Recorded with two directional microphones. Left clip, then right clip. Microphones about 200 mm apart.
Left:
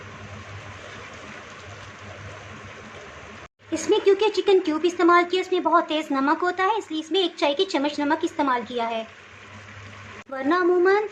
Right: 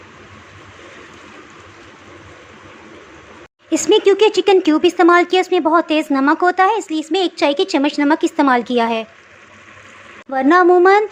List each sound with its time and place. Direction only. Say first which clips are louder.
3.7 s speech: right 7 dB; 30° right (ahead or behind)
10.3 s speech: right 10 dB; 30° right (ahead or behind)